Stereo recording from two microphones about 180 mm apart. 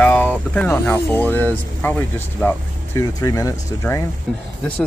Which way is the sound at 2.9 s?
20° left (ahead or behind).